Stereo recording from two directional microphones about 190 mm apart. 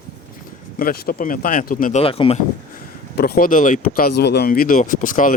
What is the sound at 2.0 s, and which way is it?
Speech, 30° left (ahead or behind).